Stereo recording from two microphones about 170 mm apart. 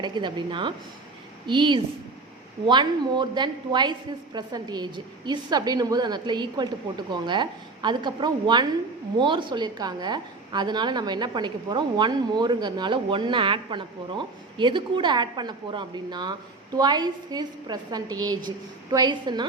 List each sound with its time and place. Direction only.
0.0 s a woman's voice: 25° right (ahead or behind)